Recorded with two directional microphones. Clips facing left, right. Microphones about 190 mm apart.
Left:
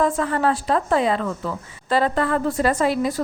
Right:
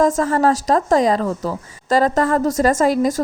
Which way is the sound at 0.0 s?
45° right (ahead or behind).